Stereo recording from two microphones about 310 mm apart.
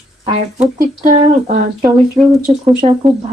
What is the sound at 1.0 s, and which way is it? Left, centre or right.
Speech, right.